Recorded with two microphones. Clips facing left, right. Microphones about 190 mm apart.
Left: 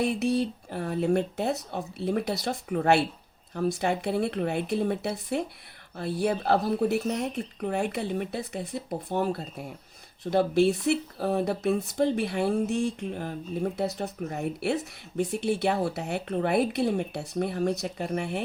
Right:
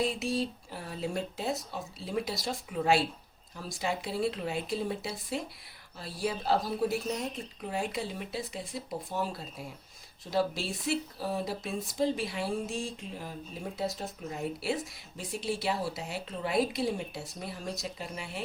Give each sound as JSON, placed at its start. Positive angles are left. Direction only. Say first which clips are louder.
{"t": 0.0, "sound": "speech", "louder": "left 5 dB", "side_deg": 65}